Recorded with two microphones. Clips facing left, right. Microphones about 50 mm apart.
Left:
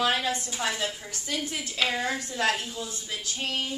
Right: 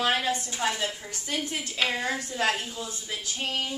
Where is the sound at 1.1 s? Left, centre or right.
Right.